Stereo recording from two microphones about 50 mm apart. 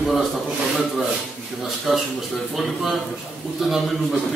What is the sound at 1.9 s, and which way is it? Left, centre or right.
A man's voice, centre.